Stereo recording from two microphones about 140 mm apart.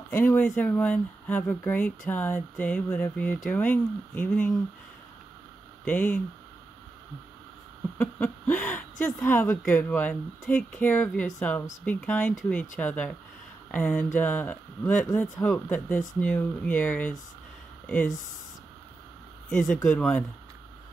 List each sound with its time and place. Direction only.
0.1 s speech: 15° left (ahead or behind)
5.9 s speech: 10° left (ahead or behind)
8.0 s a sound: 10° left (ahead or behind)
9.0 s speech: 15° left (ahead or behind)
19.5 s speech: 5° left (ahead or behind)